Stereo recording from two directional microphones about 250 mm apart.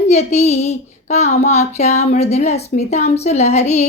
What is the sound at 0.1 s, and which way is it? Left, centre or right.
Child singing, left.